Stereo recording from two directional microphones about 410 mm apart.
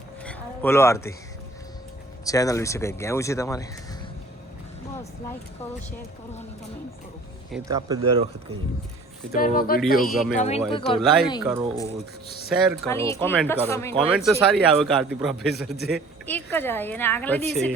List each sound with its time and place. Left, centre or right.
0.3 s a sound: centre
2.2 s speech: centre
7.5 s speech: centre
9.3 s speech: left
11.4 s a woman's voice: centre